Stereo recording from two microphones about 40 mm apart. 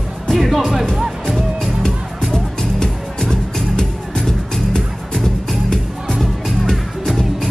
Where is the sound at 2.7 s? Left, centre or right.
Centre.